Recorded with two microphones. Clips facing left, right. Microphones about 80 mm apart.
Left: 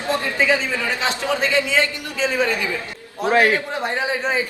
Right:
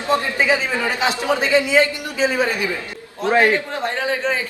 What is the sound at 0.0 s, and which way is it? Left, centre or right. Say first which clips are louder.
A man's voice: right 2 dB; right.